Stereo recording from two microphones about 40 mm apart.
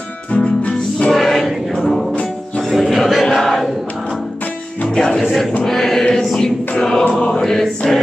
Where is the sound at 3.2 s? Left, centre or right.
Centre.